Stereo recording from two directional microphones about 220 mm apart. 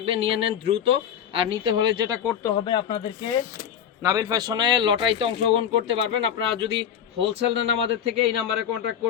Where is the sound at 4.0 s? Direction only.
15° right (ahead or behind).